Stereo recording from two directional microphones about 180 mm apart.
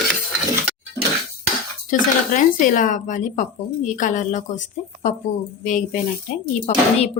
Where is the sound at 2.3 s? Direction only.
45° left (ahead or behind).